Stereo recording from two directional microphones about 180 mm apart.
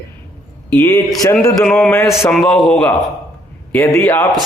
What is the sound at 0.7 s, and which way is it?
Speech, 15° left (ahead or behind).